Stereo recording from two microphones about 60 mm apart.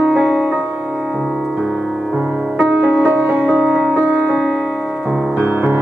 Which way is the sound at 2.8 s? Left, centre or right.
Right.